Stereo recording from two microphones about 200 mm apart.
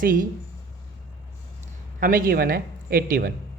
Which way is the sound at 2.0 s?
45° right (ahead or behind).